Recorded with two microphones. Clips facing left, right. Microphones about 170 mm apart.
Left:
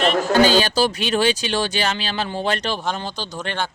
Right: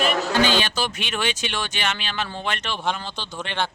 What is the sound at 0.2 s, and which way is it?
Speech, 40° left (ahead or behind).